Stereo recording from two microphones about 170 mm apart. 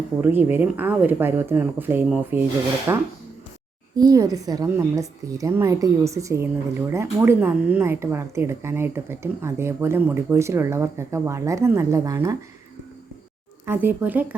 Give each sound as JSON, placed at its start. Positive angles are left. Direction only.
{"t": 0.2, "sound": "a woman's voice", "side_deg": -10}
{"t": 13.7, "sound": "a woman's voice", "side_deg": -10}